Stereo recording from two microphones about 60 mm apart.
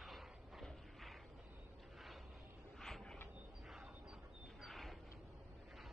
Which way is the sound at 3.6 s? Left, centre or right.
Centre.